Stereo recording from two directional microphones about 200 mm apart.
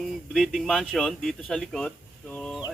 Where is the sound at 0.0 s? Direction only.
Centre (ahead or behind).